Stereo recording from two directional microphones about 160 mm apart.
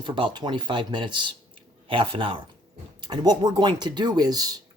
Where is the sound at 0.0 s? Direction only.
30° right (ahead or behind).